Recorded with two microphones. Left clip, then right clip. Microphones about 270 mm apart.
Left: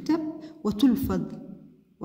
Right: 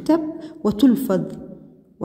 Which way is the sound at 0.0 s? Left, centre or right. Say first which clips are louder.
Right 8 dB; centre.